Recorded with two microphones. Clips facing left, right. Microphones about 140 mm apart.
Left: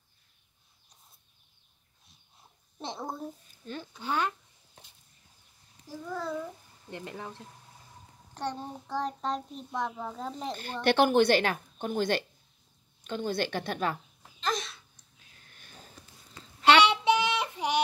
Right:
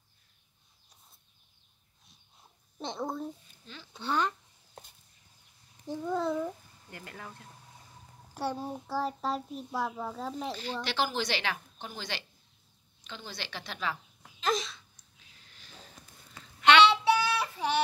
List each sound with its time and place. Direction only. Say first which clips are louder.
2.8 s a child's voice: right 2 dB; centre (ahead or behind)
3.6 s speech: left 10 dB; 50° left (ahead or behind)
4.0 s speech: even; 10° left (ahead or behind)
5.9 s a child's voice: right 5 dB; 20° right (ahead or behind)
6.9 s speech: left 6 dB; 20° left (ahead or behind)
8.4 s a child's voice: right 1 dB; 10° right (ahead or behind)
10.5 s speech: left 7 dB; 55° left (ahead or behind)
14.4 s a sound: right 2 dB; centre (ahead or behind)
15.4 s sniff: even; 50° left (ahead or behind)
16.8 s child singing: right 1 dB; 15° left (ahead or behind)